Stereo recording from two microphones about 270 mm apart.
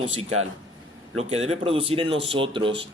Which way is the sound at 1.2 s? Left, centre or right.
Right.